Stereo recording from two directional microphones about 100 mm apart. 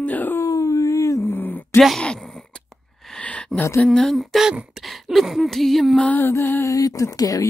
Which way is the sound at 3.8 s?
5° left (ahead or behind).